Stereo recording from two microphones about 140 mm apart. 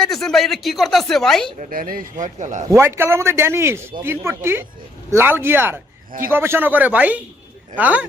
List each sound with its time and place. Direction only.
0.0 s speech: centre (ahead or behind)
1.7 s a man's voice: 85° right; by 2.6 s 60° right (ahead or behind)
2.6 s a man's voice: 20° right (ahead or behind)